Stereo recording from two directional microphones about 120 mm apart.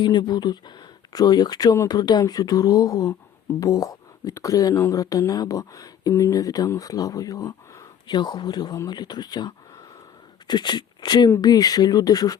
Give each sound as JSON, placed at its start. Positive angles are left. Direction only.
{"t": 0.0, "sound": "speech", "side_deg": 40}